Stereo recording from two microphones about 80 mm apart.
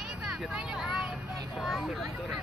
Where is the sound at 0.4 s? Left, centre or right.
Centre.